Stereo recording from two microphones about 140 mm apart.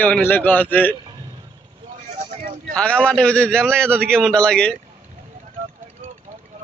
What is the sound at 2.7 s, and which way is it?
A man's voice, 10° left (ahead or behind).